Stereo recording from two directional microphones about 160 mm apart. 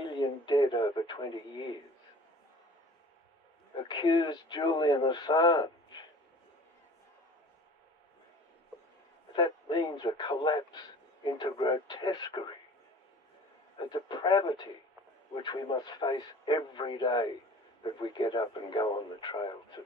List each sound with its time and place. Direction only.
0.0 s radio: 30° left (ahead or behind)
3.7 s a man's voice: 30° left (ahead or behind)
9.3 s a man's voice: 30° left (ahead or behind)
13.7 s a man's voice: 30° left (ahead or behind)